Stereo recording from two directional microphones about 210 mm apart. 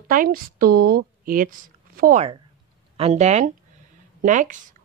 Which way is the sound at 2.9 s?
30° right (ahead or behind).